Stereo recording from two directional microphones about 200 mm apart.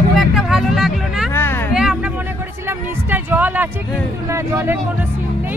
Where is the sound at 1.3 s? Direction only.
10° left (ahead or behind).